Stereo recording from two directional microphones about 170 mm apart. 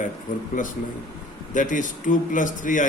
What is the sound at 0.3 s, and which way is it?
Speech, 50° left (ahead or behind).